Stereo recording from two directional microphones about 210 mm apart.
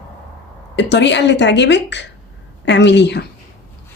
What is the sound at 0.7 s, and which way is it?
Speech, 55° left (ahead or behind).